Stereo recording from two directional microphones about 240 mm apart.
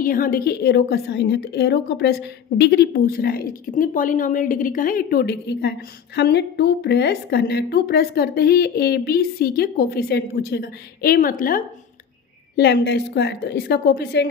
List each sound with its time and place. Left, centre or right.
0.0 s a woman's voice: left